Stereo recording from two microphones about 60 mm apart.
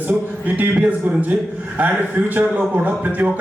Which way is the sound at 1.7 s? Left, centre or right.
Right.